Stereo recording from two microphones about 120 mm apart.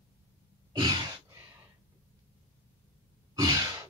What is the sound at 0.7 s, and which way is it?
Sigh, 35° right (ahead or behind).